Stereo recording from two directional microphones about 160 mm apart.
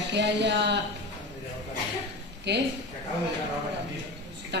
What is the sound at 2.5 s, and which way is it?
Speech, 90° right.